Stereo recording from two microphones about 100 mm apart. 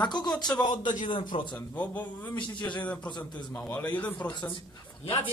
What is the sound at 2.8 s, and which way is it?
A man's voice, 15° left (ahead or behind).